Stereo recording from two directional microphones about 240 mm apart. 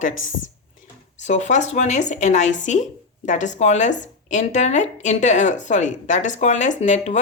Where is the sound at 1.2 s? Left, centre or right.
Left.